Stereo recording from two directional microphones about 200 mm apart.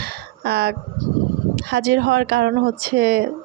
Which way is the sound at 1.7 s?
60° right (ahead or behind).